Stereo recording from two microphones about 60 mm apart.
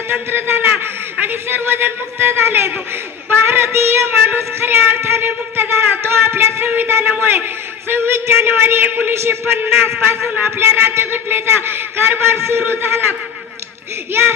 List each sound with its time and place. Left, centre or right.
0.1 s child singing: right